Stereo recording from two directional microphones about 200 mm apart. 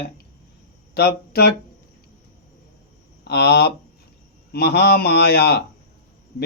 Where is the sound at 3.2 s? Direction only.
55° left (ahead or behind).